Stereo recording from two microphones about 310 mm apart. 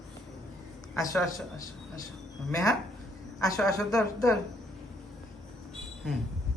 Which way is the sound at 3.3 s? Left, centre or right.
Centre.